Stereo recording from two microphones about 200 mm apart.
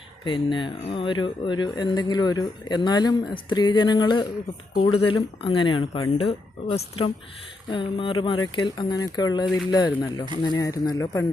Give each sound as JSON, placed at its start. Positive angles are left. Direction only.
{"t": 0.3, "sound": "speech", "side_deg": 25}